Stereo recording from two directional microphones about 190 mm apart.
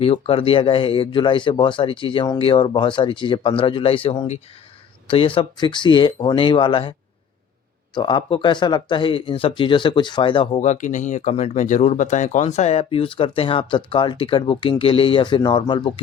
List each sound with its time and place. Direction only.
0.0 s speech: 30° left (ahead or behind)
7.9 s speech: 25° left (ahead or behind)